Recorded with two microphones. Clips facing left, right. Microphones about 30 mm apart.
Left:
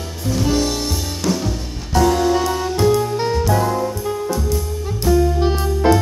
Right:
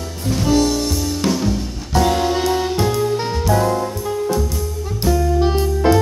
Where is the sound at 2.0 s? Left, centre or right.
Right.